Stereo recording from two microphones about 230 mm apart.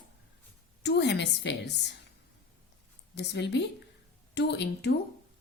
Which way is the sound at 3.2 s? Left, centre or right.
Left.